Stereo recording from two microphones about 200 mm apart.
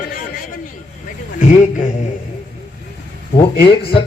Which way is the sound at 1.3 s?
40° left (ahead or behind).